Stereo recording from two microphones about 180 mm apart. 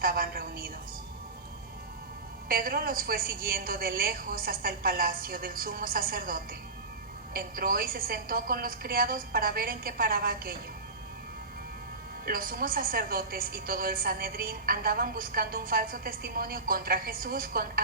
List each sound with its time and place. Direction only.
0.0 s a sound: 55° right (ahead or behind)
2.5 s a woman's voice: 55° right (ahead or behind)
12.2 s a woman's voice: 55° right (ahead or behind)